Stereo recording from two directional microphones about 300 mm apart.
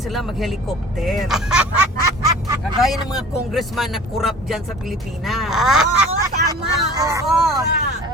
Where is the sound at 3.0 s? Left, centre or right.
Centre.